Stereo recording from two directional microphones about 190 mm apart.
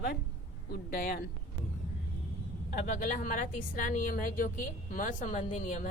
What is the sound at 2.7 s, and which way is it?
A woman's voice, 40° left (ahead or behind).